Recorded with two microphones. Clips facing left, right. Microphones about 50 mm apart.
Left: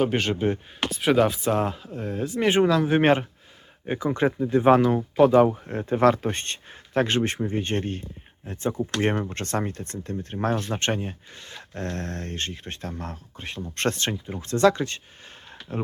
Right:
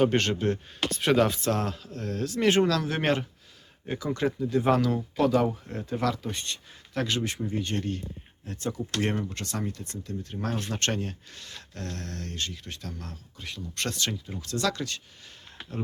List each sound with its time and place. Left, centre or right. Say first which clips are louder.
0.0 s speech: left 1 dB; centre
0.9 s speech: left 3 dB; centre; by 10.7 s left
10.7 s speech: left 3 dB; left